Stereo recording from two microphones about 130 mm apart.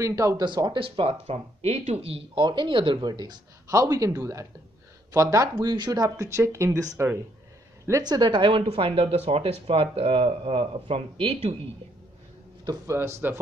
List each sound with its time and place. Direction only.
0.0 s speech: 25° right (ahead or behind)
0.5 s speech: 35° right (ahead or behind)
1.2 s speech: 55° right (ahead or behind); by 7.2 s 25° right (ahead or behind)
8.0 s speech: 35° right (ahead or behind); by 11.5 s 50° right (ahead or behind)
12.6 s speech: 20° right (ahead or behind)